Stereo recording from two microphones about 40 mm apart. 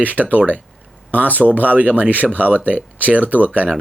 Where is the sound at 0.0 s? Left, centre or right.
Right.